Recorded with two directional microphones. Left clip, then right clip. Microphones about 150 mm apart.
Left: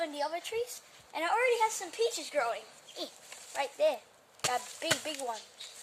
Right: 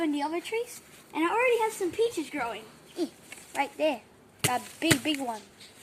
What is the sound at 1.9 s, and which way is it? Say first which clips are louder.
Speech: right 3 dB; 25° left (ahead or behind).